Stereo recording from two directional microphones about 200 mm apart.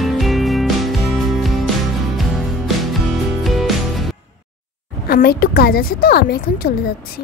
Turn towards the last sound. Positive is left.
turn(degrees=50)  # may be behind; listen again after turning